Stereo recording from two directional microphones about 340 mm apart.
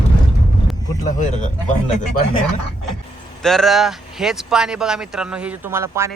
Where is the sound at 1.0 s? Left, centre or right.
Left.